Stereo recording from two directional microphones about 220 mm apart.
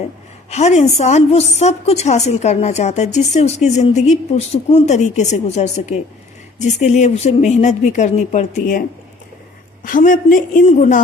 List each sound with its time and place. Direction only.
0.5 s a woman's voice: 30° left (ahead or behind)
9.8 s a woman's voice: 40° left (ahead or behind)